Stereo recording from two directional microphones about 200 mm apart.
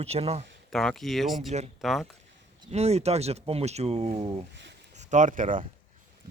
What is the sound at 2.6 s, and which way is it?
Speech, 35° right (ahead or behind).